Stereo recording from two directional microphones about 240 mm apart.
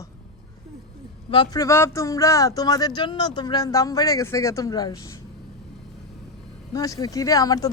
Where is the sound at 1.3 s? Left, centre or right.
Centre.